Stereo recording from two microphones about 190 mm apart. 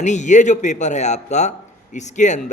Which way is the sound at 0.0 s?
40° left (ahead or behind).